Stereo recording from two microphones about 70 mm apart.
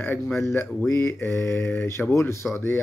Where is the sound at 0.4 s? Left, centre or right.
Left.